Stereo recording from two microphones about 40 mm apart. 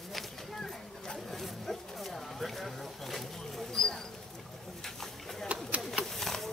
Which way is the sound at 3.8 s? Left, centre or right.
Centre.